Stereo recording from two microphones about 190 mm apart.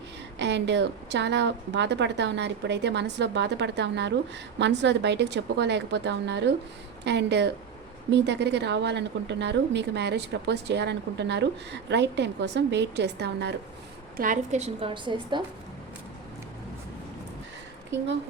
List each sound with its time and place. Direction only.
0.3 s a woman's voice: 65° right (ahead or behind)
14.2 s a woman's voice: 40° right (ahead or behind); by 15.4 s 25° right (ahead or behind)